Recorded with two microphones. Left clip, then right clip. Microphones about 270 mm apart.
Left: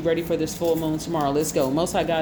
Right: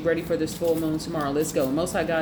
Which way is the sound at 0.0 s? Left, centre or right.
Left.